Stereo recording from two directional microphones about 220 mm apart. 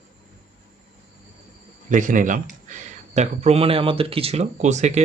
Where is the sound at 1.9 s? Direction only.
35° right (ahead or behind).